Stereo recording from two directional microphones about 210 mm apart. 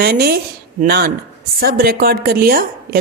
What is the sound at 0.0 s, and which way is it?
Speech, 45° right (ahead or behind).